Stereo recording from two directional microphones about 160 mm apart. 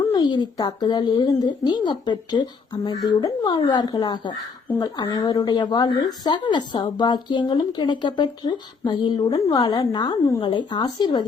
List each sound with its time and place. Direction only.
0.0 s speech: 25° left (ahead or behind)